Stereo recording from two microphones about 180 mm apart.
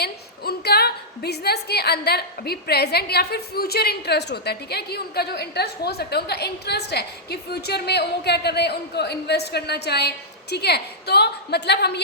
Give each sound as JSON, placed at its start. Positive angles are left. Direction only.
{"t": 0.0, "sound": "a woman's voice", "side_deg": 60}